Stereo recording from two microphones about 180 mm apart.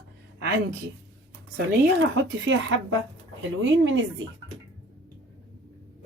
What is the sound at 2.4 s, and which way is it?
A woman's voice, 90° right.